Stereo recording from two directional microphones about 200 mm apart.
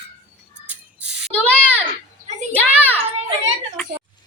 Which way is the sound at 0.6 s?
5° right (ahead or behind).